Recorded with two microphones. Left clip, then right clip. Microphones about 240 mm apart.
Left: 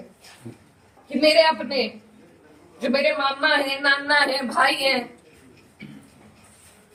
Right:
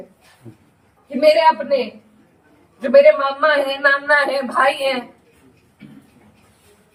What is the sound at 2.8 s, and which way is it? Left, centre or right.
A man's voice, centre.